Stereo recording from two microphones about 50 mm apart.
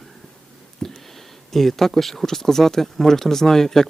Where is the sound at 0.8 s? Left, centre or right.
Centre.